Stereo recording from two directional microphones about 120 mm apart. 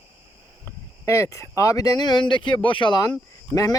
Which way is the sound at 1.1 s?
25° left (ahead or behind).